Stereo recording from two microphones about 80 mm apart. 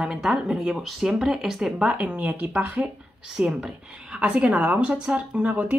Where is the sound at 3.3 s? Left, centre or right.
Centre.